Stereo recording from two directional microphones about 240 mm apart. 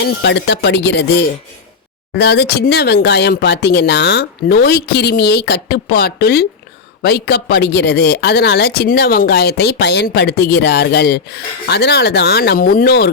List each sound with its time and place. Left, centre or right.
0.0 s speech: left
2.1 s speech: left